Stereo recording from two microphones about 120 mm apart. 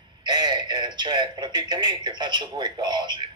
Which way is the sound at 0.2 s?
40° right (ahead or behind).